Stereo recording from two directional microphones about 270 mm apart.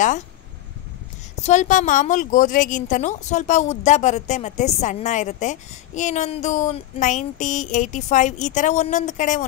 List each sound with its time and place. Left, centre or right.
1.4 s a woman's voice: left